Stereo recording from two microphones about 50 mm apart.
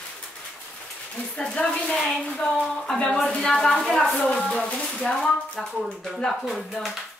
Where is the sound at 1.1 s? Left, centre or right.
Centre.